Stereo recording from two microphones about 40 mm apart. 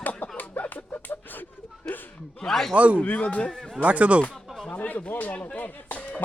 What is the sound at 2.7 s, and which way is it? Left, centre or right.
Speech, right.